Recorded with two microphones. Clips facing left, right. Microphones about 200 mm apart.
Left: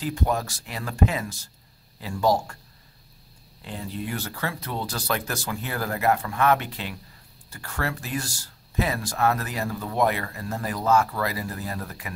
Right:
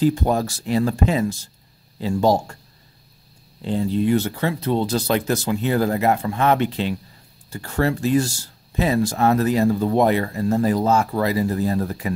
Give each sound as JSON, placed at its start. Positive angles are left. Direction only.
{"t": 0.0, "sound": "speech", "side_deg": -30}
{"t": 3.6, "sound": "speech", "side_deg": -30}